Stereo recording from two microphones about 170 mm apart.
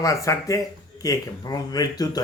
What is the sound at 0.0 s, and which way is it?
Speech, 20° left (ahead or behind).